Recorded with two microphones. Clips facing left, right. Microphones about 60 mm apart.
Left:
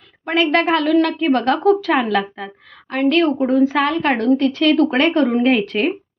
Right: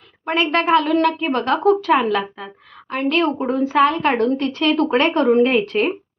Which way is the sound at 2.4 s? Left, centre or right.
Right.